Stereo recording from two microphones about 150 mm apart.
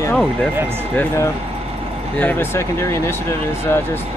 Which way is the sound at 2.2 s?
15° left (ahead or behind).